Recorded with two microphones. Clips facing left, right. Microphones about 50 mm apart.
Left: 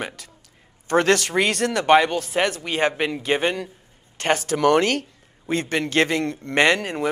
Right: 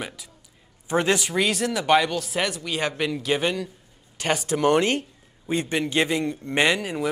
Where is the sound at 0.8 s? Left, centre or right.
Left.